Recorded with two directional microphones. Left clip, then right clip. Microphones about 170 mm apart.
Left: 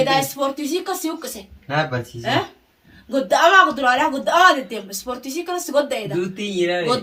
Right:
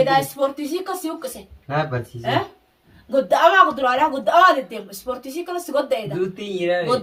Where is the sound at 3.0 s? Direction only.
20° left (ahead or behind).